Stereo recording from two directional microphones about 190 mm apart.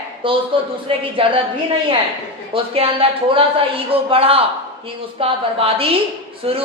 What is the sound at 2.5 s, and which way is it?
A man's voice, 30° right (ahead or behind).